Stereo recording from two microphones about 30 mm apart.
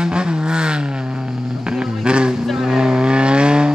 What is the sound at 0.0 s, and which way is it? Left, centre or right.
Vehicle, right.